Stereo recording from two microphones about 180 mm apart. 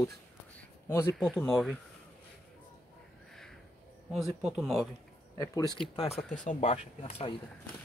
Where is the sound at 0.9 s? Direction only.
15° left (ahead or behind).